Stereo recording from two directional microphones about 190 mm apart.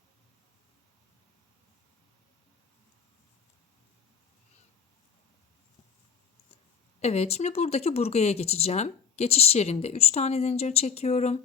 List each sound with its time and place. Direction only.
7.0 s speech: 35° left (ahead or behind)